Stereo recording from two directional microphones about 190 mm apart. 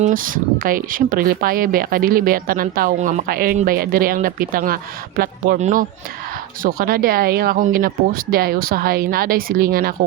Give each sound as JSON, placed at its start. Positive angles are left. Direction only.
{"t": 0.0, "sound": "speech", "side_deg": -45}